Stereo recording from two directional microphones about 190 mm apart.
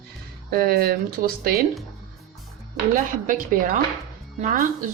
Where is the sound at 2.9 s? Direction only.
45° right (ahead or behind).